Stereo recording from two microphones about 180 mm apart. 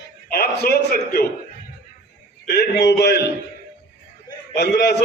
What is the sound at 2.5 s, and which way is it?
Speech, 60° left (ahead or behind).